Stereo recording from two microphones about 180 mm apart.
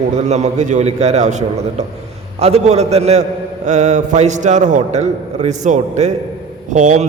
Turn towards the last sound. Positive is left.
turn(degrees=-40)  # may be behind; listen again after turning